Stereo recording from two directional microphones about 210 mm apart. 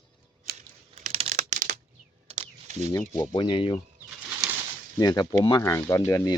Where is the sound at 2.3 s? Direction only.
35° right (ahead or behind).